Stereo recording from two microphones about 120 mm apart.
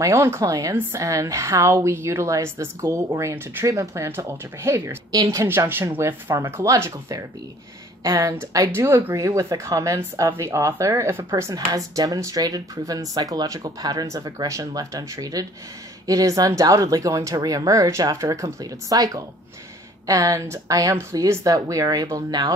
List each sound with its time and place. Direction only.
0.0 s a woman's voice: 20° right (ahead or behind)